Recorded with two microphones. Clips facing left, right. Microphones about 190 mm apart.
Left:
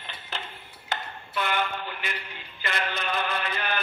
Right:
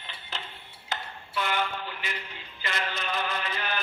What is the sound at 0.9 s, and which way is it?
Ping, 60° left (ahead or behind).